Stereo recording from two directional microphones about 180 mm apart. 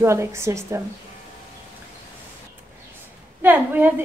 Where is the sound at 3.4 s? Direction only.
10° right (ahead or behind).